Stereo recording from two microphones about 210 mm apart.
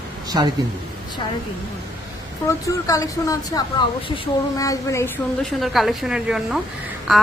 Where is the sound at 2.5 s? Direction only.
15° left (ahead or behind).